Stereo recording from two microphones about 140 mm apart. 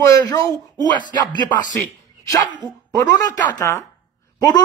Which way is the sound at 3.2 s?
25° left (ahead or behind).